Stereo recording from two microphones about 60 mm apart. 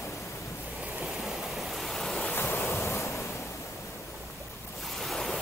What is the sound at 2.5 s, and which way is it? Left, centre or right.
Waves, left.